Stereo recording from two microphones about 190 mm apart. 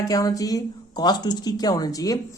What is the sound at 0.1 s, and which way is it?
Speech, 20° left (ahead or behind).